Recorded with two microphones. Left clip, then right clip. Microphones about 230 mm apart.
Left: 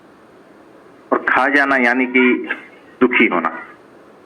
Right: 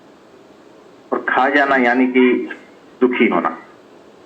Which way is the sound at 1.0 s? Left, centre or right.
Left.